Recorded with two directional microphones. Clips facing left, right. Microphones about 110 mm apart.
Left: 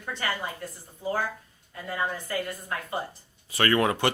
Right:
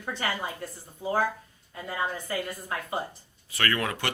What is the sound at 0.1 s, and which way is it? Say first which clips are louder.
Speech: even; 5° right (ahead or behind).